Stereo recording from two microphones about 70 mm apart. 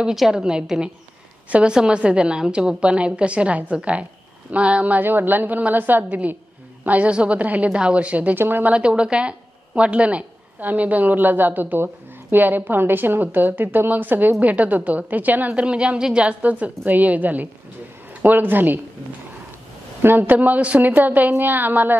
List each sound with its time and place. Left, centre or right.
0.0 s a woman's voice: centre; by 8.7 s right
8.7 s a woman's voice: centre
20.0 s a woman's voice: right